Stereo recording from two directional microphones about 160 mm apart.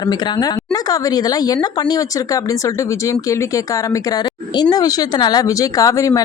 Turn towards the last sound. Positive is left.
turn(degrees=20)  # may be behind; listen again after turning